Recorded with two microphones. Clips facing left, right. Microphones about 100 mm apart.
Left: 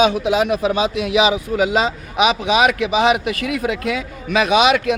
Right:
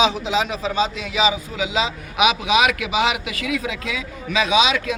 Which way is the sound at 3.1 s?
50° left (ahead or behind).